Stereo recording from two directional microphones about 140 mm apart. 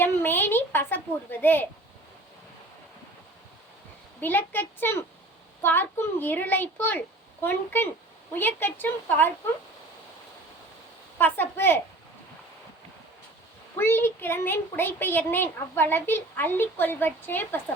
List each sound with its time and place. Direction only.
0.0 s a woman's voice: 15° left (ahead or behind)
4.2 s a woman's voice: 15° left (ahead or behind)
11.2 s a woman's voice: 15° left (ahead or behind)
13.7 s a woman's voice: 15° left (ahead or behind)